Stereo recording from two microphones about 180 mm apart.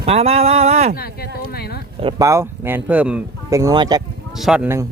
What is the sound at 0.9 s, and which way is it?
Speech, 60° left (ahead or behind).